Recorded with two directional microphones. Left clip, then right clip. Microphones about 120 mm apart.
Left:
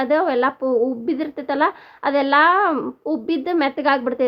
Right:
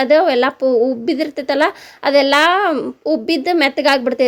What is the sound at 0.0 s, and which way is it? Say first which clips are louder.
A woman's voice: right 6 dB; 30° right (ahead or behind).